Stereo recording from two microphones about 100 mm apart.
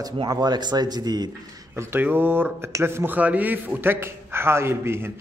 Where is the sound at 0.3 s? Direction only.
45° right (ahead or behind).